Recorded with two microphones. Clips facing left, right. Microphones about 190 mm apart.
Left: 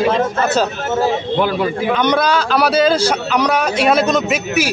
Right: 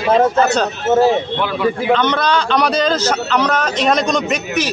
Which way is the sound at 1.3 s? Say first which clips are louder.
Left 1 dB; 40° left (ahead or behind).